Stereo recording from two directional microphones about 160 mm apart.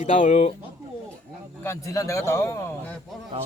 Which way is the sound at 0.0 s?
50° left (ahead or behind).